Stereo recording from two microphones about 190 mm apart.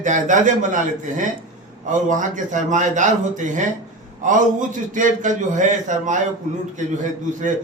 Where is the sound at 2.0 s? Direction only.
40° right (ahead or behind).